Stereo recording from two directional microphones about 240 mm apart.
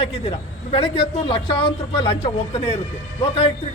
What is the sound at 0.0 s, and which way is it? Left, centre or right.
A man's voice, left.